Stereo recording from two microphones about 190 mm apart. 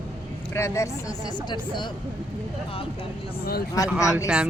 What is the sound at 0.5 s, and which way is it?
Speech, 15° left (ahead or behind).